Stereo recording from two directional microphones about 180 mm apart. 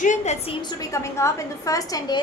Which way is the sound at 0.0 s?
40° left (ahead or behind).